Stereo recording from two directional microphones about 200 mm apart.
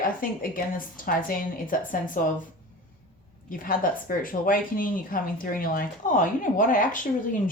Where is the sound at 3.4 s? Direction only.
45° left (ahead or behind).